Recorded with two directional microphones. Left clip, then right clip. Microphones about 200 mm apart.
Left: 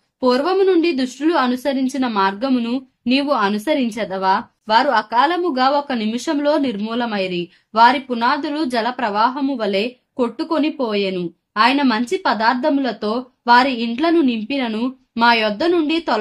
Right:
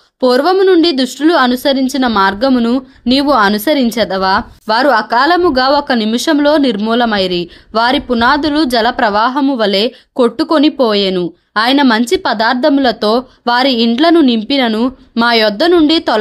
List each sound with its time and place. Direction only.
0.2 s a woman's voice: 30° right (ahead or behind)